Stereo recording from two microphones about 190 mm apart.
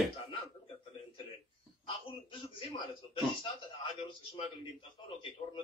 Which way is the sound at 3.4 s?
25° left (ahead or behind).